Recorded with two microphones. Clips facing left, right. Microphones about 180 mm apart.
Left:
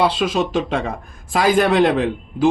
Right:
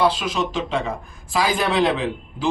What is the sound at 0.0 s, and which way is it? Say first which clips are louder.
Speech: left 3 dB; 55° left (ahead or behind).